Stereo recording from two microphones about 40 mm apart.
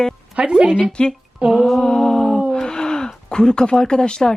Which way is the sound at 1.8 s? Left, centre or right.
Centre.